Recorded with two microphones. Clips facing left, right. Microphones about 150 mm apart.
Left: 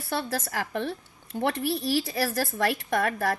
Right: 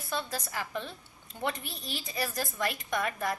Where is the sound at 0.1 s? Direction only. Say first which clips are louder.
Left 5 dB; 80° left.